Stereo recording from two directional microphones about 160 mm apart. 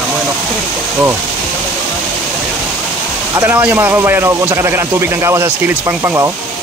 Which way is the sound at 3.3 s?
15° right (ahead or behind).